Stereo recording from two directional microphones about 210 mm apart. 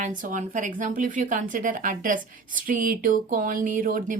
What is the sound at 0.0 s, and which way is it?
A woman's voice, 40° right (ahead or behind).